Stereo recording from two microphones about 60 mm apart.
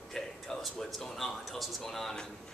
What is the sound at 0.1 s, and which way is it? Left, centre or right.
Speech, centre.